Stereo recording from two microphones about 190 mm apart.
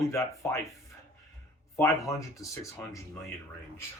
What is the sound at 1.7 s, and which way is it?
Speech, 15° left (ahead or behind).